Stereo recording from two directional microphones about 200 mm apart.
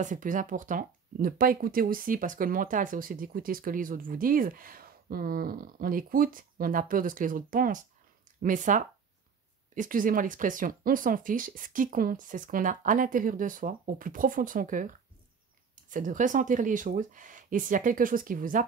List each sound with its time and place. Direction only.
0.0 s speech: 40° right (ahead or behind)